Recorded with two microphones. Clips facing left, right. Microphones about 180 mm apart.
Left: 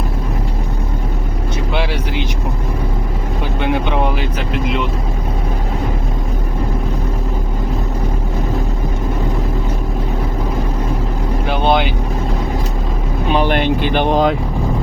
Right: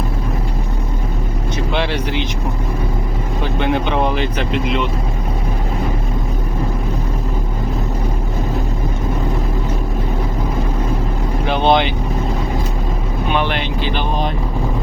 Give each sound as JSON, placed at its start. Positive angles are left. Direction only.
{"t": 1.7, "sound": "vehicle", "side_deg": 5}
{"t": 3.6, "sound": "speech", "side_deg": 10}
{"t": 11.4, "sound": "vehicle", "side_deg": 5}
{"t": 13.3, "sound": "speech", "side_deg": 45}